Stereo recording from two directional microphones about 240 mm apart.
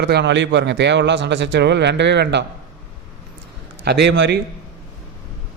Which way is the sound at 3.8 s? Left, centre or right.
Right.